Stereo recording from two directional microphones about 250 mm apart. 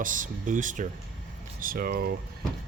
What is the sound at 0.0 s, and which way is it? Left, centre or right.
Speech, right.